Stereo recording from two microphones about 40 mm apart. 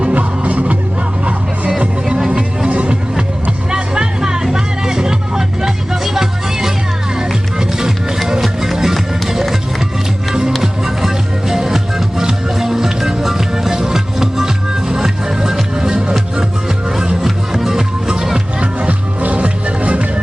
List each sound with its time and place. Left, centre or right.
0.0 s music: right
2.0 s music: centre
2.6 s music: right
3.7 s music: right
10.6 s music: centre
17.2 s music: centre; by 20.2 s right